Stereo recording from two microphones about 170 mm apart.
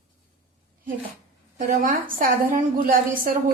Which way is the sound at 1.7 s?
50° right (ahead or behind).